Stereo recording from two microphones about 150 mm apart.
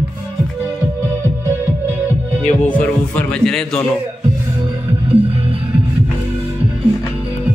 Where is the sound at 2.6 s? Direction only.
10° left (ahead or behind).